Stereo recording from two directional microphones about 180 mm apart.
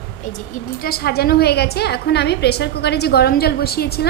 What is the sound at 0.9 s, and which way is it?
A woman's voice, 60° left (ahead or behind).